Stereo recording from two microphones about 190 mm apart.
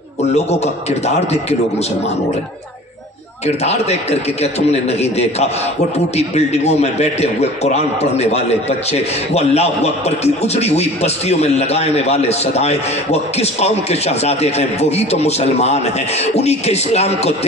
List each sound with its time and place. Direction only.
0.3 s a man's voice: 35° left (ahead or behind)
3.4 s a man's voice: 35° left (ahead or behind)